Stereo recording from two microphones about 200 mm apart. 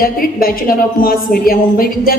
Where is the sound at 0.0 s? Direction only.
45° left (ahead or behind).